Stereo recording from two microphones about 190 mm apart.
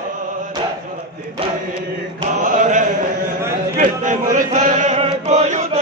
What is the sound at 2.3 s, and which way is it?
Chant, 40° right (ahead or behind).